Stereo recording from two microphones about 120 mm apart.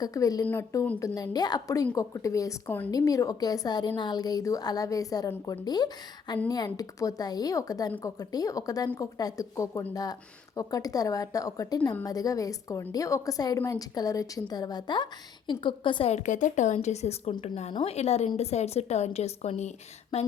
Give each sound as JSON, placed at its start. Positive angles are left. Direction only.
{"t": 0.0, "sound": "a woman's voice", "side_deg": 30}
{"t": 16.1, "sound": "speech", "side_deg": 90}